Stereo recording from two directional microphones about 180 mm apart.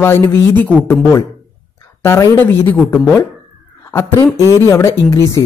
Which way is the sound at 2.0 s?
15° left (ahead or behind).